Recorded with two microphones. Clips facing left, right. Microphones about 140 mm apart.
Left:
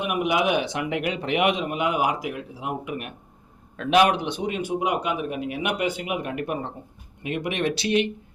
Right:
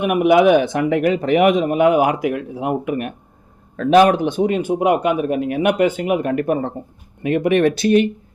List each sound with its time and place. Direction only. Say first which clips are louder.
0.0 s speech: right 10 dB; 55° right (ahead or behind)